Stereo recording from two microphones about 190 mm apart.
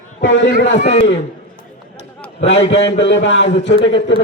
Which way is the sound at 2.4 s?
30° left (ahead or behind).